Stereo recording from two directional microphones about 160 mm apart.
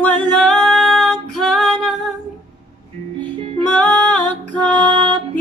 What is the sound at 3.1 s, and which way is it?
Music, 35° right (ahead or behind).